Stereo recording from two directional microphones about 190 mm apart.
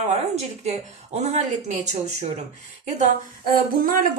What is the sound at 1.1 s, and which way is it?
Speech, 35° right (ahead or behind).